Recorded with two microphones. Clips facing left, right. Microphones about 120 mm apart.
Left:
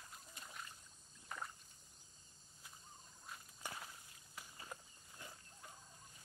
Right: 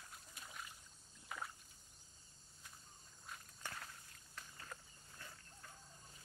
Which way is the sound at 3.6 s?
10° left (ahead or behind).